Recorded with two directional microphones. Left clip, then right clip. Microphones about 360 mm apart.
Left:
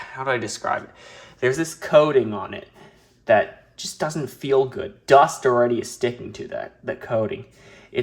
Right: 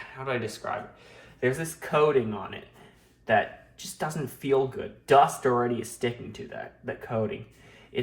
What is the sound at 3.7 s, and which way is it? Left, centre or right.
Speech, left.